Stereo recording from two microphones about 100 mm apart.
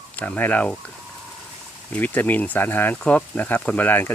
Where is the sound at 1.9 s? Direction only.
15° left (ahead or behind).